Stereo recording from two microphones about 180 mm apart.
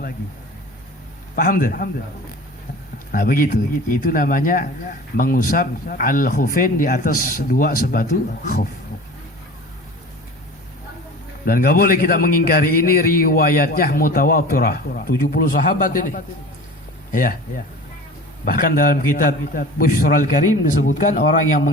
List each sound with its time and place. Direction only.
1.4 s a man's voice: 50° left (ahead or behind)
3.1 s a man's voice: 50° left (ahead or behind)
11.4 s a man's voice: 55° left (ahead or behind)